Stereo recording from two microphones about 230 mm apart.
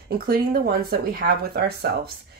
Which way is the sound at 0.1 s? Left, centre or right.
Right.